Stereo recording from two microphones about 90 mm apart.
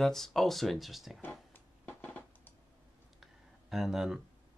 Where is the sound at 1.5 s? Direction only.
20° left (ahead or behind).